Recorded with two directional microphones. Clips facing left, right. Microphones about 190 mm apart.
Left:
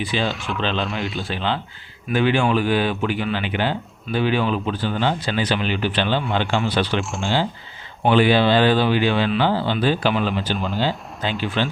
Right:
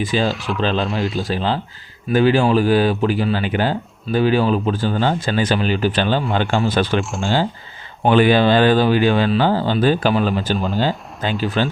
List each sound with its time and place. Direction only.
0.0 s speech: 45° right (ahead or behind)
0.3 s speech: centre (ahead or behind)
1.2 s speech: 40° right (ahead or behind)
8.0 s speech: 50° right (ahead or behind)